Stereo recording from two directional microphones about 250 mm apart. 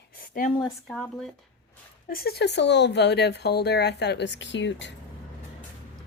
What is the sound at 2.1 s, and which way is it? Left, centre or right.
Speech, left.